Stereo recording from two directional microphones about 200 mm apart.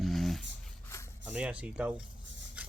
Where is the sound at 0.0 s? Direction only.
Centre (ahead or behind).